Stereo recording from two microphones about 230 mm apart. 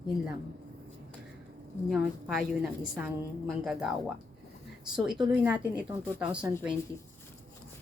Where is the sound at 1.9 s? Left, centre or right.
Centre.